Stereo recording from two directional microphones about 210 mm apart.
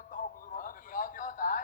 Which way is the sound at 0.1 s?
40° left (ahead or behind).